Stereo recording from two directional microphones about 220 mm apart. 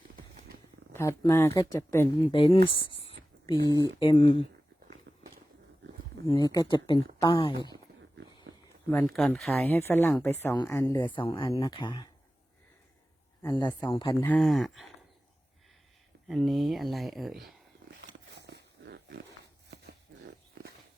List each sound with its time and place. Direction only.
0.9 s speech: 15° left (ahead or behind)
2.3 s speech: 25° left (ahead or behind)
3.0 s whispering: 20° left (ahead or behind)
3.8 s speech: 20° left (ahead or behind)
4.9 s a sound: 40° right (ahead or behind)
6.2 s speech: 20° left (ahead or behind)
8.9 s speech: 10° left (ahead or behind)
9.7 s speech: 10° left (ahead or behind)
13.4 s speech: 15° left (ahead or behind)
14.3 s speech: centre (ahead or behind)
16.3 s speech: centre (ahead or behind)
18.0 s wild animals: 50° right (ahead or behind)